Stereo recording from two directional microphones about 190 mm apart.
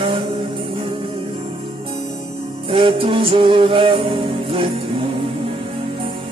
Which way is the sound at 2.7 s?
25° right (ahead or behind).